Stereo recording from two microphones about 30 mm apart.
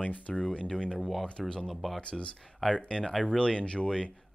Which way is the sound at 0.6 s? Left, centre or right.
Left.